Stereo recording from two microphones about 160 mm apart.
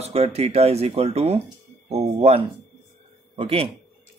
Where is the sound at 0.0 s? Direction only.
40° right (ahead or behind).